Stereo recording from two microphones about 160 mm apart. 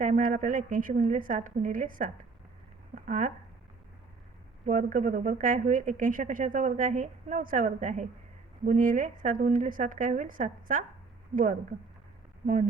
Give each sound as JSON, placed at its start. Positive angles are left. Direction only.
{"t": 0.0, "sound": "speech", "side_deg": -55}
{"t": 4.6, "sound": "speech", "side_deg": -55}